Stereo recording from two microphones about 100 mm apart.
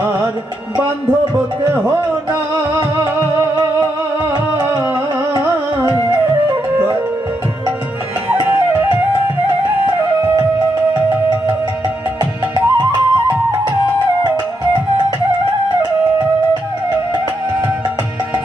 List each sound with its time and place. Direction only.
1.6 s speech: 25° right (ahead or behind)
4.5 s music: 25° right (ahead or behind)
8.3 s flute: 15° right (ahead or behind)
12.2 s music: 40° right (ahead or behind)